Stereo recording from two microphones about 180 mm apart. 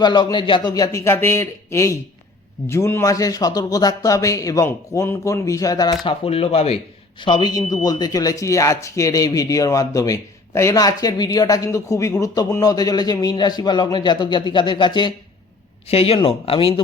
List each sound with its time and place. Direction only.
0.0 s a man's voice: 25° left (ahead or behind)
6.1 s a man's voice: 35° left (ahead or behind)